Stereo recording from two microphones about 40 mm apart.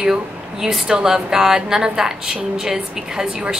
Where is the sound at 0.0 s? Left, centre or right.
Centre.